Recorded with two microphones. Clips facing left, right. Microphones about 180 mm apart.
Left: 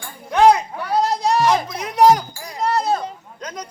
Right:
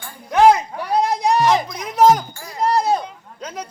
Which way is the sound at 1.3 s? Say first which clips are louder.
Right 1 dB; centre (ahead or behind).